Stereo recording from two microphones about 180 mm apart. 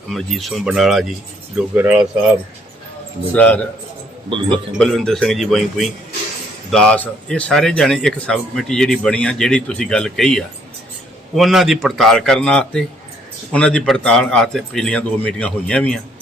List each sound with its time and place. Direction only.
0.1 s a man's voice: centre (ahead or behind)
3.3 s a man's voice: 10° left (ahead or behind)
4.3 s a man's voice: 30° right (ahead or behind)
4.5 s a man's voice: centre (ahead or behind)